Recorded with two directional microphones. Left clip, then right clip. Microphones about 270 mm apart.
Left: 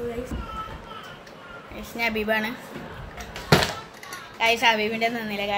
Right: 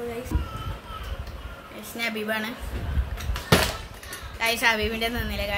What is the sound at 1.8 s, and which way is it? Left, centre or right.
Speech, centre.